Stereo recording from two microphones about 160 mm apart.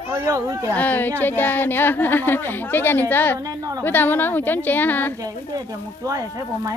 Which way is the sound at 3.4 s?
20° right (ahead or behind).